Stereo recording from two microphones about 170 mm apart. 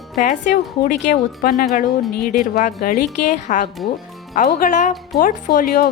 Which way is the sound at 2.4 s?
50° left (ahead or behind).